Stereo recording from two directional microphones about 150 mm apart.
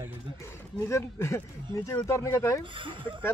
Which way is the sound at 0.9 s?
20° left (ahead or behind).